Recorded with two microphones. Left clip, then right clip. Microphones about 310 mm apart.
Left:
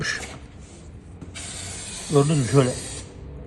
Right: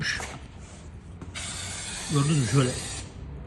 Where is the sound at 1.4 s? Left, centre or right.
Centre.